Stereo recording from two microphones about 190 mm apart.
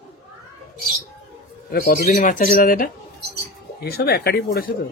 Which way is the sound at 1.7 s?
50° left (ahead or behind).